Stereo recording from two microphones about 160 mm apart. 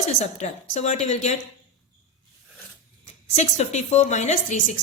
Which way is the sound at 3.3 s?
45° left (ahead or behind).